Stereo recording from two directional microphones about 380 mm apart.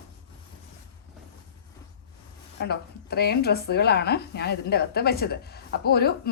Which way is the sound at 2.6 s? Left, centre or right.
Left.